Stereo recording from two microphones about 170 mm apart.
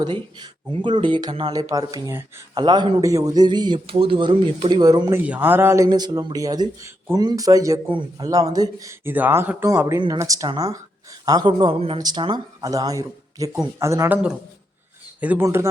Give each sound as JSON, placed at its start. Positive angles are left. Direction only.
{"t": 0.0, "sound": "speech", "side_deg": -25}
{"t": 2.6, "sound": "speech", "side_deg": -25}
{"t": 5.2, "sound": "speech", "side_deg": -10}
{"t": 15.2, "sound": "speech", "side_deg": -10}